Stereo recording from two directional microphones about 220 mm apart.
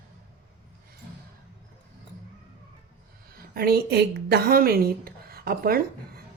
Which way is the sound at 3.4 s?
45° right (ahead or behind).